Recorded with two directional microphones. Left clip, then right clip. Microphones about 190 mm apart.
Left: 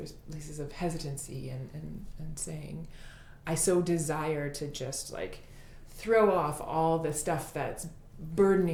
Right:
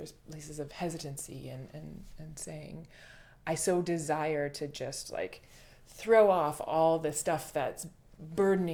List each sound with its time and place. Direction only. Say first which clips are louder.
0.0 s a woman's voice: left 1 dB; 30° right (ahead or behind)